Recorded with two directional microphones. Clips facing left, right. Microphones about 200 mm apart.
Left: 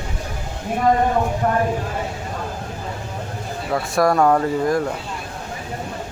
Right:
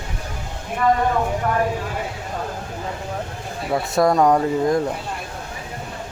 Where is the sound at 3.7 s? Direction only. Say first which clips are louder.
Even; 20° right (ahead or behind).